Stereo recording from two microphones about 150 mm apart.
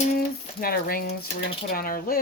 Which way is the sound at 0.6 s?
75° left (ahead or behind).